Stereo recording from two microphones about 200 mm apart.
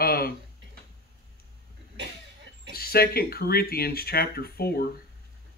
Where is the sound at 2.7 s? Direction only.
50° left (ahead or behind).